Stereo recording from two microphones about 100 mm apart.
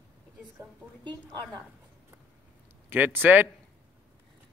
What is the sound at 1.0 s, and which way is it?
Speech, 45° right (ahead or behind).